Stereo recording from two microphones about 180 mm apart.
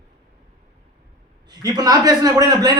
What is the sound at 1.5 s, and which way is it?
A man's voice, 20° right (ahead or behind).